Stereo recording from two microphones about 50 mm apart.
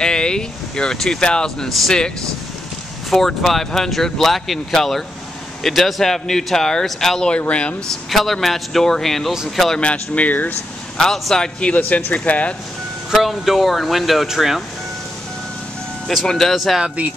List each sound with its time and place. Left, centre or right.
0.0 s a sound: centre
1.7 s speech: centre
3.1 s speech: centre
7.2 s speech: left
8.1 s speech: centre
9.8 s speech: left
11.0 s speech: centre
11.7 s speech: left
13.1 s speech: centre
16.3 s speech: centre
16.8 s speech: right